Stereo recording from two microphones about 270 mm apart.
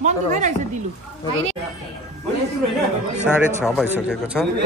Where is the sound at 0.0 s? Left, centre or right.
Right.